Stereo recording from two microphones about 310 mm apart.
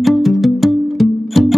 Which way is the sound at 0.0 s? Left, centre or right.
Centre.